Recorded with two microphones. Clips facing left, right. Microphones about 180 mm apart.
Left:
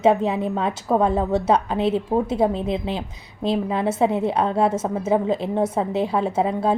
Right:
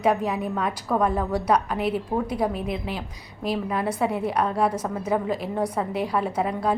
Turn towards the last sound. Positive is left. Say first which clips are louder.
# left 4 dB
turn(degrees=25)  # may be behind; listen again after turning